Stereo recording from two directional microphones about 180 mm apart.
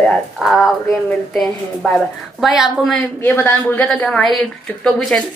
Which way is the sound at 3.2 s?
10° left (ahead or behind).